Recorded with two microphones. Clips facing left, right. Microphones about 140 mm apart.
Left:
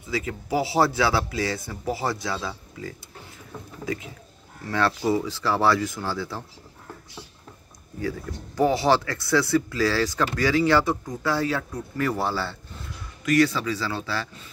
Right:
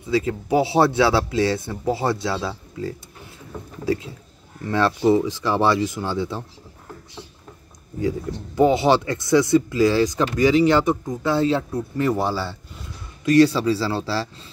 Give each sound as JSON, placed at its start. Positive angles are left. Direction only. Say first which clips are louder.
{"t": 0.0, "sound": "speech", "louder": "right 8 dB", "side_deg": -25}
{"t": 8.0, "sound": "speech", "louder": "right 6 dB", "side_deg": -20}
{"t": 13.2, "sound": "speech", "louder": "right 6 dB", "side_deg": -30}